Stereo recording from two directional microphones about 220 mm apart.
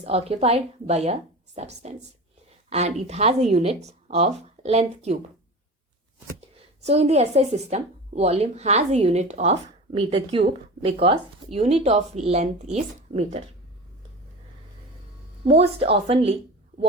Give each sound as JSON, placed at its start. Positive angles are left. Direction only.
{"t": 0.0, "sound": "speech", "side_deg": -25}
{"t": 6.8, "sound": "speech", "side_deg": -30}
{"t": 15.4, "sound": "speech", "side_deg": -25}